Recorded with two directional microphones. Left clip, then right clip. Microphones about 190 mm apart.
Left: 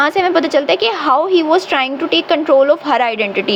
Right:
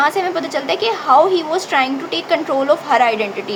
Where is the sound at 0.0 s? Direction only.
35° left (ahead or behind).